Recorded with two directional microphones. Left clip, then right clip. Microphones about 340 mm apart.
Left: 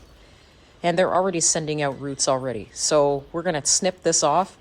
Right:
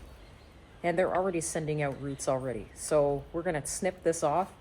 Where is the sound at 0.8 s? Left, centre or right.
Left.